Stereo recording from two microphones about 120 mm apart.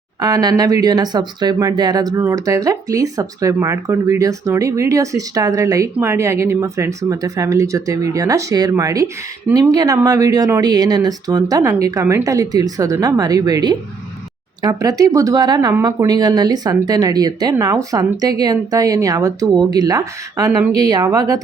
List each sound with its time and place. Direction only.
0.2 s speech: 35° right (ahead or behind)